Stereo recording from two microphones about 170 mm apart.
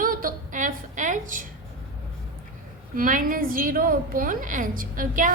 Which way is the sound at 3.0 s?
50° right (ahead or behind).